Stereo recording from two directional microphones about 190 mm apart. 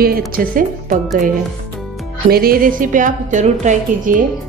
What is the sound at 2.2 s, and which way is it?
A woman's voice, 50° right (ahead or behind).